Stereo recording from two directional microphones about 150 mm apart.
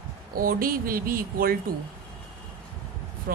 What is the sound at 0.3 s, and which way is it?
Speech, 75° right (ahead or behind).